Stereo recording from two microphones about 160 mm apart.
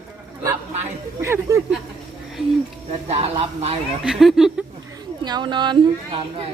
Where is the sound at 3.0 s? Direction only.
40° right (ahead or behind).